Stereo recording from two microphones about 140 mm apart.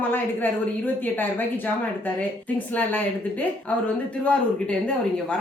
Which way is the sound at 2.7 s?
10° left (ahead or behind).